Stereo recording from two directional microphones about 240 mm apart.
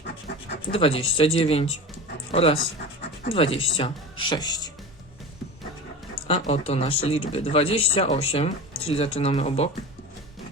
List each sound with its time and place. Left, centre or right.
0.7 s speech: left
6.2 s speech: left